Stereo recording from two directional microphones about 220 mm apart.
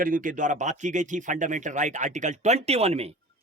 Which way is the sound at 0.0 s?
40° right (ahead or behind).